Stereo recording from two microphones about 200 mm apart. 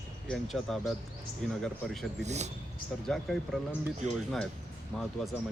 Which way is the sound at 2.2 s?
35° right (ahead or behind).